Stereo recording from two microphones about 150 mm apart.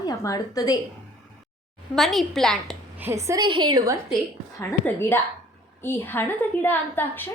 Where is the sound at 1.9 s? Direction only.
Centre (ahead or behind).